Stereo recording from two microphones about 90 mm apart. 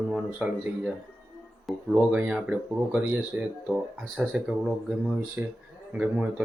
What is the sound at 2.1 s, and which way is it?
Speech, 15° right (ahead or behind).